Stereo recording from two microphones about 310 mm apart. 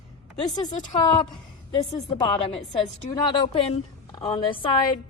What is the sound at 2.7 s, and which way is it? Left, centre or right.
A woman's voice, centre.